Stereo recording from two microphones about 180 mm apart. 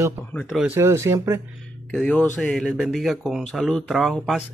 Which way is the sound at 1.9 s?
5° left (ahead or behind).